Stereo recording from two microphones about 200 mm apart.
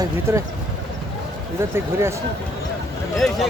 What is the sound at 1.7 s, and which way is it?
Speech, 15° right (ahead or behind).